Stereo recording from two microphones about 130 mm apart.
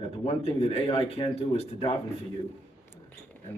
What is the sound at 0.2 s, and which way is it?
Speech, 50° left (ahead or behind).